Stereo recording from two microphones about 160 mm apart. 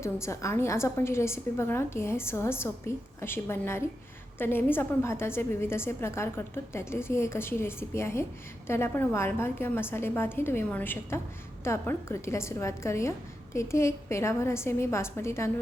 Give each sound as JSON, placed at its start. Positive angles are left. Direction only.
{"t": 0.0, "sound": "a woman's voice", "side_deg": 15}